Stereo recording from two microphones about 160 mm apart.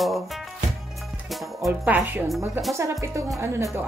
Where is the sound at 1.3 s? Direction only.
Centre (ahead or behind).